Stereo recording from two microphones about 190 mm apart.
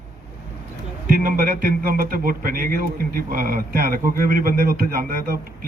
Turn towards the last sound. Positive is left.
turn(degrees=-50)  # may be behind; listen again after turning